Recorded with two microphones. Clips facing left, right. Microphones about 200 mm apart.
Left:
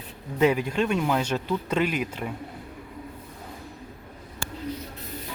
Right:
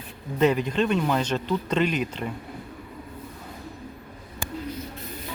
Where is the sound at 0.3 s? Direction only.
10° left (ahead or behind).